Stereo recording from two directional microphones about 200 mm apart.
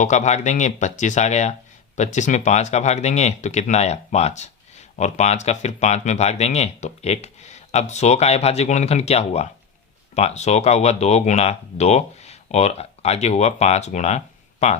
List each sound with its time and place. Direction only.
0.0 s speech: 35° left (ahead or behind)